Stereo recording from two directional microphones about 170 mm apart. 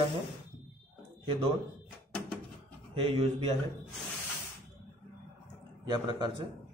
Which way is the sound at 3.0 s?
35° right (ahead or behind).